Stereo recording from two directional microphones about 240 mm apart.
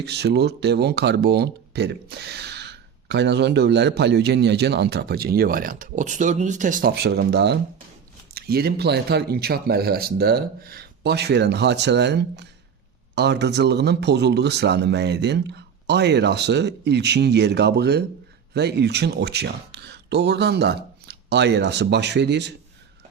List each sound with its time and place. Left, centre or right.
0.0 s speech: right